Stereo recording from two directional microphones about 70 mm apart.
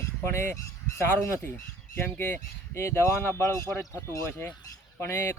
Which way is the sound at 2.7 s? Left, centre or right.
Left.